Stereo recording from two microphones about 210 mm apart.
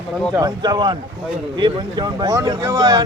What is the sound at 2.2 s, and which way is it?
Speech, 15° right (ahead or behind).